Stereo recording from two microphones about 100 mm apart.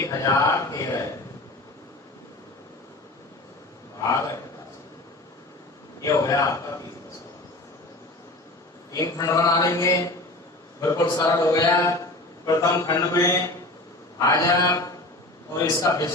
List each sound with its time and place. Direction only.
0.0 s speech: 35° left (ahead or behind)
6.0 s speech: 35° left (ahead or behind)
8.9 s a man's voice: 35° left (ahead or behind)